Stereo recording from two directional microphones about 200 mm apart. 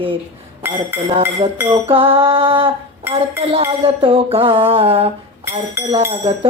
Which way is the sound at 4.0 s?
25° right (ahead or behind).